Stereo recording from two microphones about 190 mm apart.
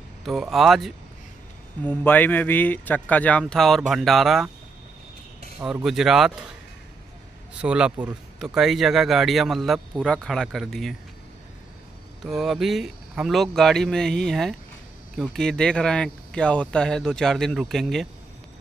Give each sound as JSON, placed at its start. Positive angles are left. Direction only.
{"t": 0.2, "sound": "speech", "side_deg": 0}
{"t": 1.8, "sound": "a man's voice", "side_deg": 10}
{"t": 5.6, "sound": "speech", "side_deg": -5}
{"t": 7.6, "sound": "speech", "side_deg": -5}
{"t": 12.2, "sound": "speech", "side_deg": 0}